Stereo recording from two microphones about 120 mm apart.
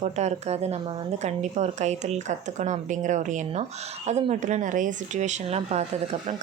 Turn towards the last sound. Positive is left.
turn(degrees=-60)  # may be behind; listen again after turning